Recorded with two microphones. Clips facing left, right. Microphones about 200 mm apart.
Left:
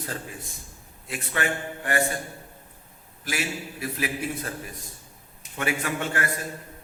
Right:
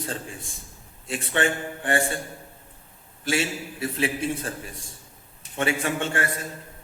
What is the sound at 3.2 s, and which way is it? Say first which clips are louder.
A man's voice: right 5 dB; 30° right (ahead or behind).